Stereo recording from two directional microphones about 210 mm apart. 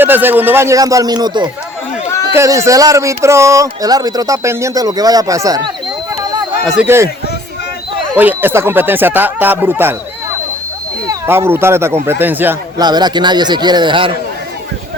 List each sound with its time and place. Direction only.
0.0 s speech: 10° right (ahead or behind)
8.1 s speech: 10° right (ahead or behind)
11.0 s speech: 15° right (ahead or behind)
12.8 s a man's voice: 20° right (ahead or behind)